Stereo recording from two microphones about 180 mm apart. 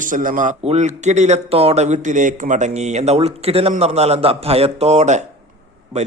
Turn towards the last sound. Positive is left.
turn(degrees=-40)  # may be behind; listen again after turning